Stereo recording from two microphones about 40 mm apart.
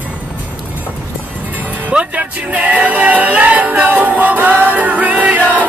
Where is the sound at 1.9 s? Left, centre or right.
Right.